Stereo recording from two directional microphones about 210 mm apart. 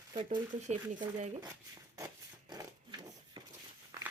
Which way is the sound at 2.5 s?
20° right (ahead or behind).